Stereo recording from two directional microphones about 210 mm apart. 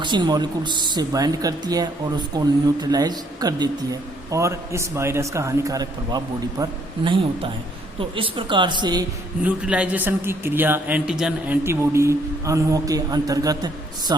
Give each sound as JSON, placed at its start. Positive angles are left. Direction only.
{"t": 0.0, "sound": "a man's voice", "side_deg": -20}
{"t": 9.4, "sound": "a man's voice", "side_deg": -5}